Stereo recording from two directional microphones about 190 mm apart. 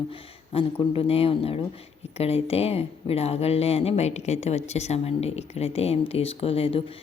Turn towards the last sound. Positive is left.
turn(degrees=30)  # may be behind; listen again after turning